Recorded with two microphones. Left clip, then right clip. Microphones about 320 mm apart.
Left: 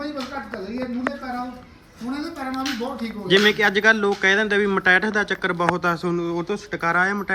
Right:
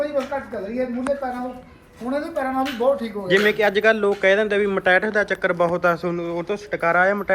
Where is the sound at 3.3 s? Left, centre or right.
Centre.